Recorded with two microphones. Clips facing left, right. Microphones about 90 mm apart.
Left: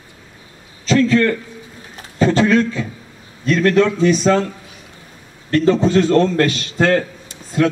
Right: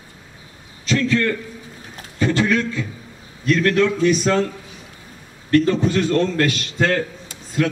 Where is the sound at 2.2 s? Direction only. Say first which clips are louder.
Left 5 dB; 30° left (ahead or behind).